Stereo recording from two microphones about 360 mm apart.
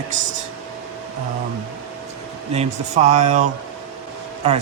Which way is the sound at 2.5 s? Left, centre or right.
Centre.